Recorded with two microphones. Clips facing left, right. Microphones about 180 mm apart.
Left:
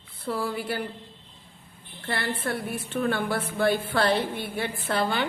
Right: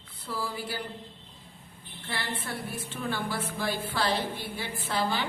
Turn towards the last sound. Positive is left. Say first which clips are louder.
# left 3 dB
turn(degrees=60)  # may be behind; listen again after turning